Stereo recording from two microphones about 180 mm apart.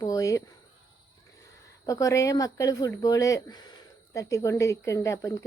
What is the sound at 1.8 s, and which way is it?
Speech, 20° left (ahead or behind).